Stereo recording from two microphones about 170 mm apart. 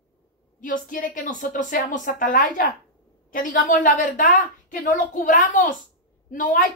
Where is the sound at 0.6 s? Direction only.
50° left (ahead or behind).